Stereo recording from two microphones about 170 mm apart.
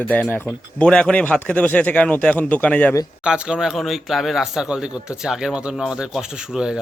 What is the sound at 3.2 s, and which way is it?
Speech, 5° right (ahead or behind).